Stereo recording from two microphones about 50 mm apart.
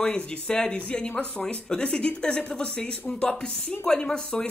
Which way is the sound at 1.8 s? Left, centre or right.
Left.